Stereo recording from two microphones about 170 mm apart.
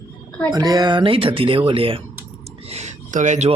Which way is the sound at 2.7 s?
40° right (ahead or behind).